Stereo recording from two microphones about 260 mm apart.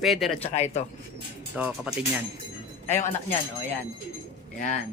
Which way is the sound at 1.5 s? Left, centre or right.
Centre.